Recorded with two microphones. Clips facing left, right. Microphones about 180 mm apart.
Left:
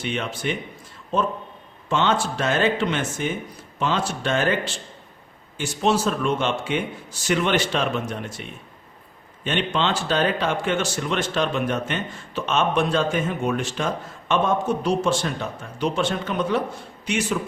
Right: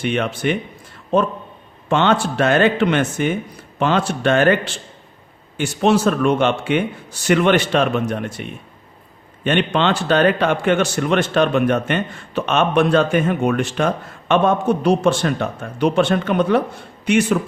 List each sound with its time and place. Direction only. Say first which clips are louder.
0.0 s speech: right 7 dB; 60° right (ahead or behind)